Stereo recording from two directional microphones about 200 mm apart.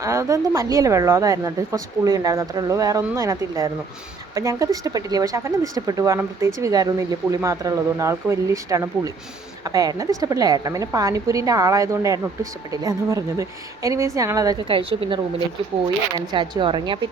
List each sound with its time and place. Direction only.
0.0 s a woman's voice: 15° right (ahead or behind)